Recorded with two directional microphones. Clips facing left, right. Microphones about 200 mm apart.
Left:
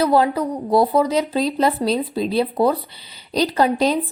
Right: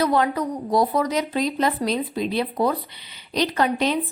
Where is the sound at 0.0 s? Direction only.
30° left (ahead or behind).